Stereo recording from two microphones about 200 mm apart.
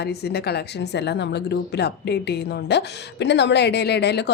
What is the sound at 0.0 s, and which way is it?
A woman's voice, 55° left (ahead or behind).